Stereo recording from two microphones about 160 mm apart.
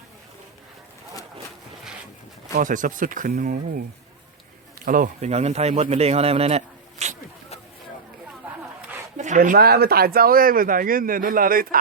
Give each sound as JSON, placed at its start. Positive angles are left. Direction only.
{"t": 2.6, "sound": "speech", "side_deg": -55}
{"t": 4.9, "sound": "speech", "side_deg": -55}
{"t": 5.3, "sound": "a man's voice", "side_deg": -40}
{"t": 9.1, "sound": "speech", "side_deg": -50}